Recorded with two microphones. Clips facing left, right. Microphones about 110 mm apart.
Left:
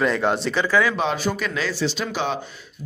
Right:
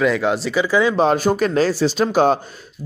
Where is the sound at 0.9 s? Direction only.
45° right (ahead or behind).